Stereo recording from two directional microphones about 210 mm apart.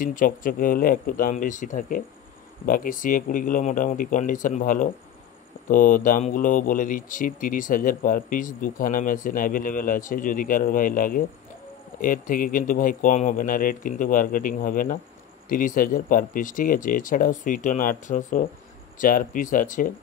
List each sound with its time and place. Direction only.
0.0 s a man's voice: 40° left (ahead or behind)